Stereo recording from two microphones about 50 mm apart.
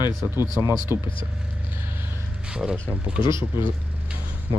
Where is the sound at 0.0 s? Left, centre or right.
Right.